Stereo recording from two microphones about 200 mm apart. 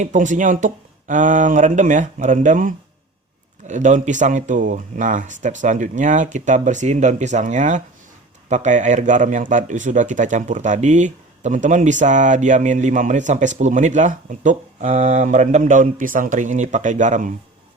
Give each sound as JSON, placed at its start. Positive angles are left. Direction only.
{"t": 0.0, "sound": "speech", "side_deg": -40}